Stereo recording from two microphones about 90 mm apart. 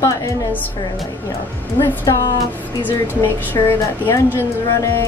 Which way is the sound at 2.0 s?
45° left (ahead or behind).